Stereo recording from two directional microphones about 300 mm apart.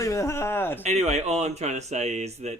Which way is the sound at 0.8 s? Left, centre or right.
Right.